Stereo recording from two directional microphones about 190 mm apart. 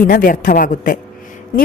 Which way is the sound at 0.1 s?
45° left (ahead or behind).